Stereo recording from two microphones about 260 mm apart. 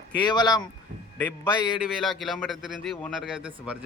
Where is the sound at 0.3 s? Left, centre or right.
Centre.